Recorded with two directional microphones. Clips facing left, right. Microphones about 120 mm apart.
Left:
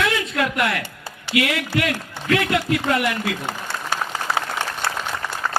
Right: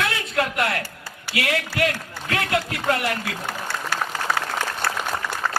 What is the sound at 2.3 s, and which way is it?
Speech, 35° right (ahead or behind).